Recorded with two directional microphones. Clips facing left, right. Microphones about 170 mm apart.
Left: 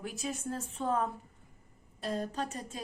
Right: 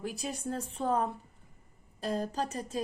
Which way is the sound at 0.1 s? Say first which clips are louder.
Right 1 dB; 35° right (ahead or behind).